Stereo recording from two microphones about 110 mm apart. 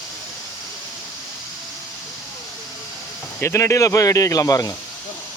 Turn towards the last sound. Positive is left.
turn(degrees=30)  # may be behind; listen again after turning